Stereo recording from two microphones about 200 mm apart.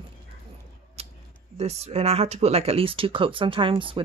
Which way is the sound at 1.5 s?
30° right (ahead or behind).